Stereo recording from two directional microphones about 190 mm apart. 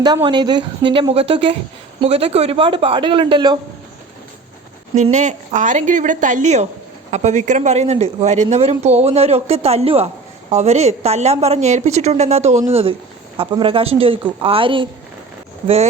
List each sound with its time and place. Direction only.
0.0 s speech: 25° right (ahead or behind)
4.9 s a woman's voice: 40° right (ahead or behind)